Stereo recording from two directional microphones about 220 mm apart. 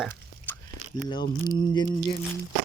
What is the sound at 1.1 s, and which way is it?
Speech, 20° left (ahead or behind).